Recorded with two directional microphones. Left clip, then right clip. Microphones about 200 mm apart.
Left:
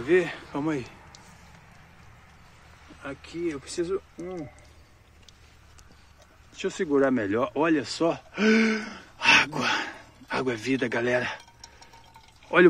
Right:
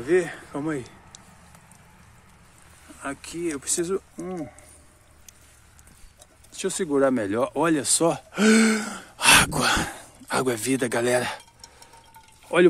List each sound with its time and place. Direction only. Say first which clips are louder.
0.0 s a man's voice: right 1 dB; 10° right (ahead or behind)
3.0 s speech: right 2 dB; 55° right (ahead or behind)
6.6 s speech: right 2 dB; 30° right (ahead or behind)
12.5 s speech: even; 20° right (ahead or behind)